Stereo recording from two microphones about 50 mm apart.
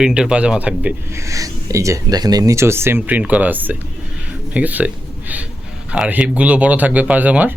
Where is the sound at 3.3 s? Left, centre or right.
Right.